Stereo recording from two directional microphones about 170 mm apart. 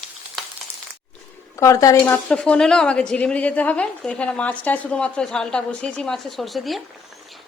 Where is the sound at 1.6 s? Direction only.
20° left (ahead or behind).